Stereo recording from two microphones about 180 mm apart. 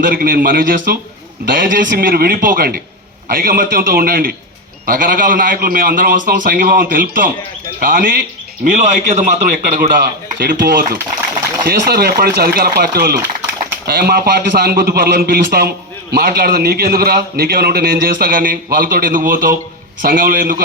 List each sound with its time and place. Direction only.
0.0 s a man's voice: 50° right (ahead or behind)
9.7 s a man's voice: 55° right (ahead or behind)